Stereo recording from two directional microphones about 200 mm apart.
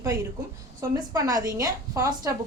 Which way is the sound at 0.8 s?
15° right (ahead or behind).